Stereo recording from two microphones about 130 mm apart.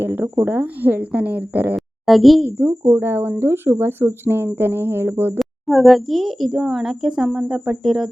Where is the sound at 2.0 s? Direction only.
Centre (ahead or behind).